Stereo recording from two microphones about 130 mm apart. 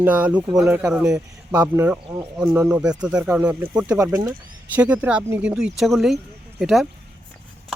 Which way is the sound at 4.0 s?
25° right (ahead or behind).